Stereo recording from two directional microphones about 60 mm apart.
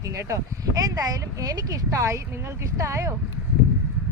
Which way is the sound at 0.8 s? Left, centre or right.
Right.